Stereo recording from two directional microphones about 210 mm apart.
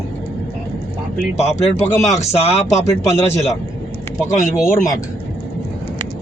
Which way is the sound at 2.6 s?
15° left (ahead or behind).